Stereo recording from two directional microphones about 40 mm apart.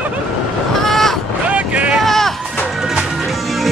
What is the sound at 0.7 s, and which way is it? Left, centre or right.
Crow, centre.